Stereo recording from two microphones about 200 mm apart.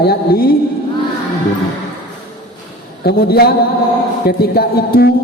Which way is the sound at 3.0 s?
50° left (ahead or behind).